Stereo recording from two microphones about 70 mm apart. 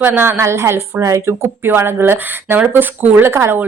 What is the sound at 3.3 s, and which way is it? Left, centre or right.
Speech, right.